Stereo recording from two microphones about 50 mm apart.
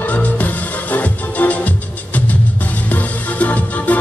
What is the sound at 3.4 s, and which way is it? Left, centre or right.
Music, left.